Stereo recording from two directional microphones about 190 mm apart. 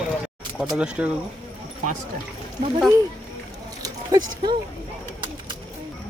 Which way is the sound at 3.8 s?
20° right (ahead or behind).